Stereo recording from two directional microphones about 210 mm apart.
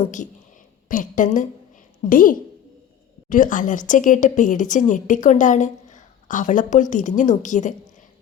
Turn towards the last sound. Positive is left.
turn(degrees=35)  # may be behind; listen again after turning